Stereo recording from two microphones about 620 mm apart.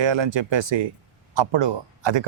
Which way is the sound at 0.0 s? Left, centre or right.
Right.